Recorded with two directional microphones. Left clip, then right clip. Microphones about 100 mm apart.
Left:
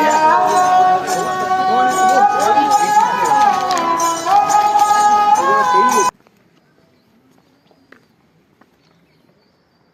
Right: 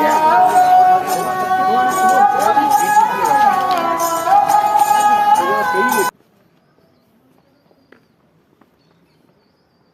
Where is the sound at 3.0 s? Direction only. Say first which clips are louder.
Even; 5° right (ahead or behind).